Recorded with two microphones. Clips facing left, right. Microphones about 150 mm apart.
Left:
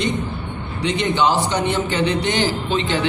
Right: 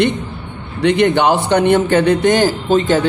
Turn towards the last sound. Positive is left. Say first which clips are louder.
# right 7 dB
turn(degrees=-45)  # may be behind; listen again after turning